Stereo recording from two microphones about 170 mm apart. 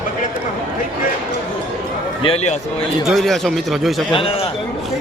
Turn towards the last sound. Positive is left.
turn(degrees=35)  # may be behind; listen again after turning